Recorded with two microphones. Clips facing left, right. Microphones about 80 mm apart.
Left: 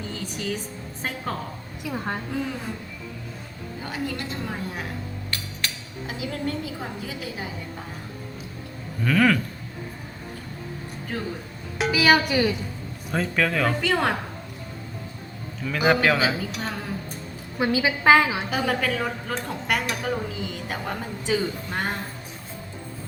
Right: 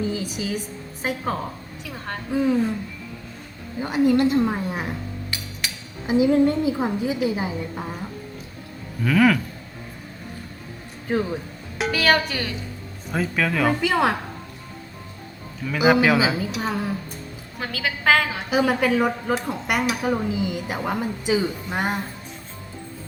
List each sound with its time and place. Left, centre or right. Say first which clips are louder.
0.1 s speech: right 3 dB; centre
1.8 s a woman's voice: left 5 dB; centre
2.3 s speech: right 12 dB; centre
3.8 s a woman's voice: right 12 dB; centre
5.3 s a sound: even; centre
6.1 s a woman's voice: right 13 dB; right
9.0 s a woman's voice: right 2 dB; centre
11.1 s a woman's voice: right 9 dB; right
11.8 s a woman's voice: left 1 dB; centre
13.1 s a woman's voice: right 1 dB; centre
15.6 s speech: right 3 dB; centre
17.6 s a woman's voice: left 5 dB; centre
18.5 s speech: right 8 dB; centre